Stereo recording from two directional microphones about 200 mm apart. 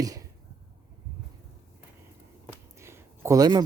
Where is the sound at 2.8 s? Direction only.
15° right (ahead or behind).